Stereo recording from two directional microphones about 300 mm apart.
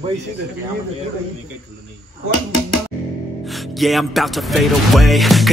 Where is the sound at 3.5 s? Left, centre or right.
Centre.